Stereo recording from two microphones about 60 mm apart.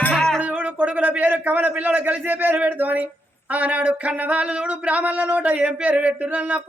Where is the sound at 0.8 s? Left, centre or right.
Right.